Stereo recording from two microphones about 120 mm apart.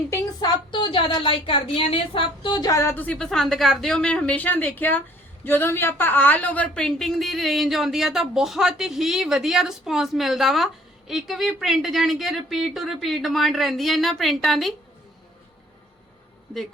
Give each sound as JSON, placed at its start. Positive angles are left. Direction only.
{"t": 0.7, "sound": "a woman's voice", "side_deg": 45}
{"t": 2.9, "sound": "a woman's voice", "side_deg": 10}